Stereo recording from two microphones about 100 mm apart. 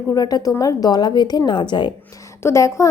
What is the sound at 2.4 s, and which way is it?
Speech, 30° left (ahead or behind).